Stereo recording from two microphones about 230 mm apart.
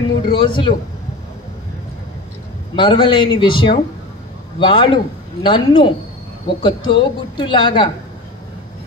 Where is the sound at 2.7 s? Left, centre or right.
Left.